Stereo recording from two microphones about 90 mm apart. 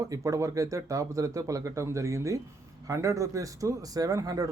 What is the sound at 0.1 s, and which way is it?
Speech, 35° right (ahead or behind).